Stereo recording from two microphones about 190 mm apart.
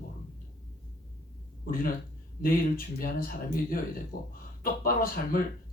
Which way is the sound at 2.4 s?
50° left (ahead or behind).